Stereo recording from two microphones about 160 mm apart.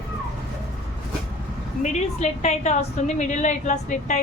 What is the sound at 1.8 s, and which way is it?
A woman's voice, 45° left (ahead or behind).